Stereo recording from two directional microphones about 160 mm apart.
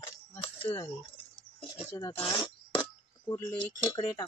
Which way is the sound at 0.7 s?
15° left (ahead or behind).